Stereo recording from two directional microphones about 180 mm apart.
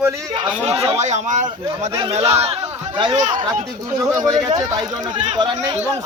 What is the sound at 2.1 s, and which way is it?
Speech, 35° right (ahead or behind).